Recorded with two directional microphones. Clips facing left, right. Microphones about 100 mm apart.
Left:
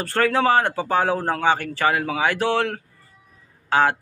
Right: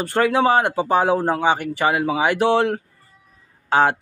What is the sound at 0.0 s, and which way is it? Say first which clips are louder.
Speech: right 2 dB; 15° right (ahead or behind).